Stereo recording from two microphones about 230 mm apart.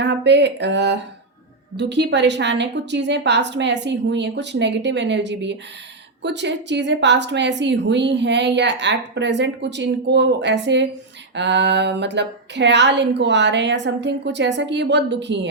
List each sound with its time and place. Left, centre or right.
0.0 s a woman's voice: right